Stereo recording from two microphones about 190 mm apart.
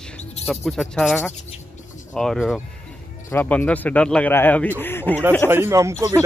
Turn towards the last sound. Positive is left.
turn(degrees=-15)  # may be behind; listen again after turning